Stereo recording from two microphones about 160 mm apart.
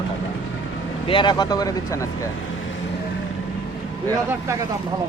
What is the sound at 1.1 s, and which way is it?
Speech, 30° left (ahead or behind).